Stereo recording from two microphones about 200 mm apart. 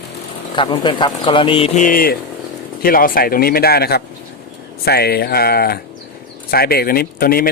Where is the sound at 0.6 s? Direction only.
25° left (ahead or behind).